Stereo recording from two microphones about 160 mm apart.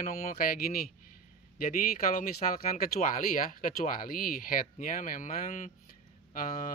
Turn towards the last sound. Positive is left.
turn(degrees=60)  # may be behind; listen again after turning